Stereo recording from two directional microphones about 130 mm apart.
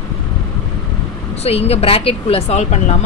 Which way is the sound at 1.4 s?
50° left (ahead or behind).